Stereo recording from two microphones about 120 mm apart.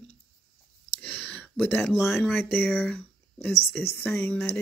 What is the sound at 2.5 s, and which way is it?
Speech, 15° left (ahead or behind).